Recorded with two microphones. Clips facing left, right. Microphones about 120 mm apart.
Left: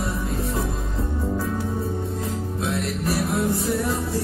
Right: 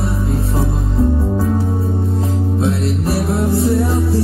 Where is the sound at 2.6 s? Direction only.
30° right (ahead or behind).